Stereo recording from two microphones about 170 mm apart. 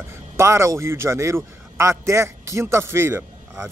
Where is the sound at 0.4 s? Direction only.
15° right (ahead or behind).